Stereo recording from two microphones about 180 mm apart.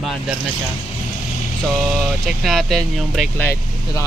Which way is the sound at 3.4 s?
15° left (ahead or behind).